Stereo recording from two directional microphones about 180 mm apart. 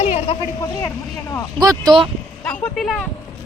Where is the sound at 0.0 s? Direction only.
35° left (ahead or behind).